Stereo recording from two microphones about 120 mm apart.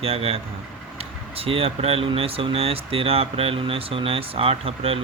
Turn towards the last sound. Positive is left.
turn(degrees=-55)  # may be behind; listen again after turning